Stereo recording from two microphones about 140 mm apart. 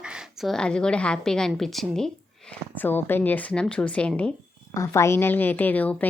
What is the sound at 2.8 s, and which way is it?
A woman's voice, 15° left (ahead or behind).